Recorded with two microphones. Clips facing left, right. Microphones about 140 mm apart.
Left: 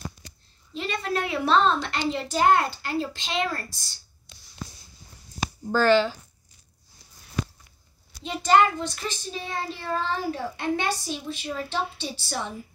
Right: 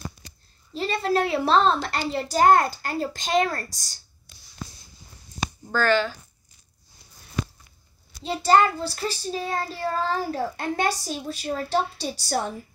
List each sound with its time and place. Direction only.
0.7 s child singing: 35° right (ahead or behind)
5.7 s speech: 25° left (ahead or behind)
8.2 s child singing: 35° right (ahead or behind)